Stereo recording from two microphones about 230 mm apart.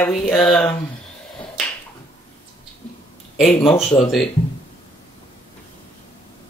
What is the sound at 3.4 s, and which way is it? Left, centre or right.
Speech, centre.